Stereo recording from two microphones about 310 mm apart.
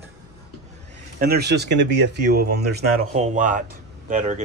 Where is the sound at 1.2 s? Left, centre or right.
Right.